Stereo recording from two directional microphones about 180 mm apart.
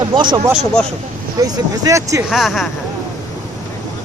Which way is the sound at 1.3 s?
20° right (ahead or behind).